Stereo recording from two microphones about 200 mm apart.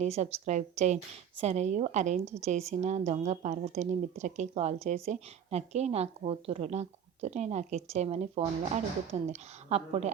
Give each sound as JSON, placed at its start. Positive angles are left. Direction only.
{"t": 0.0, "sound": "a woman's voice", "side_deg": -35}